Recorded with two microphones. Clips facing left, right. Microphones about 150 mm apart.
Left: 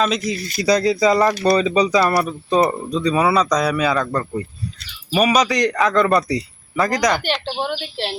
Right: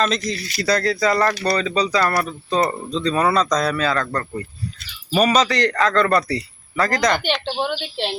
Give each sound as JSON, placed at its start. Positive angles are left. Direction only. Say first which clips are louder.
{"t": 0.0, "sound": "speech", "louder": "left 1 dB", "side_deg": 5}
{"t": 2.0, "sound": "speech", "louder": "left 3 dB", "side_deg": 10}